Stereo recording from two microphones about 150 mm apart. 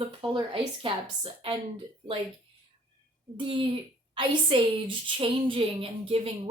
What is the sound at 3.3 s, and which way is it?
A woman's voice, 35° right (ahead or behind).